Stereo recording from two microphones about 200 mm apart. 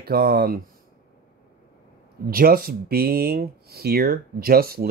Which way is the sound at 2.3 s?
45° right (ahead or behind).